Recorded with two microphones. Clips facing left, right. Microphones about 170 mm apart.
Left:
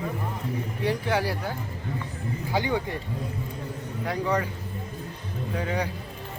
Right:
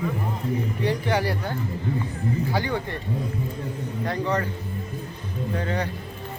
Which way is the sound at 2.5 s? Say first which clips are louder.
Even; 15° left (ahead or behind).